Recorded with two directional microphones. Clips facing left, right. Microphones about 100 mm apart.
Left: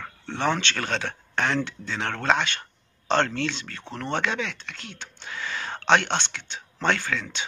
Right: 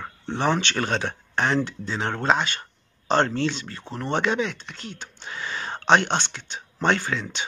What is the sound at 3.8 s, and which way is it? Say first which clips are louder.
Speech: right 2 dB; 10° right (ahead or behind).